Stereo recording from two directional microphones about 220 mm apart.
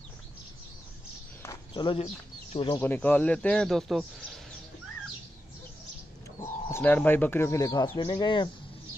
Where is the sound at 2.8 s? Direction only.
10° left (ahead or behind).